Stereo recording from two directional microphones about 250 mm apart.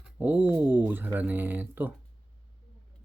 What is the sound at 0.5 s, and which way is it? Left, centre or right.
Speech, centre.